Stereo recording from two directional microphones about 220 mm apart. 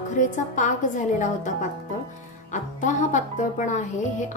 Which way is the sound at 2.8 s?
35° left (ahead or behind).